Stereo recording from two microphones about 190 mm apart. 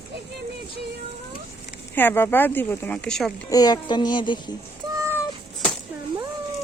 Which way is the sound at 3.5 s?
20° left (ahead or behind).